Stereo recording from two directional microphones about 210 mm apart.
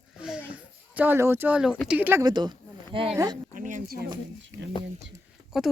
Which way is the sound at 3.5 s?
40° right (ahead or behind).